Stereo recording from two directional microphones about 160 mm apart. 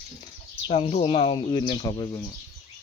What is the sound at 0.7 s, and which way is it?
Speech, 40° left (ahead or behind).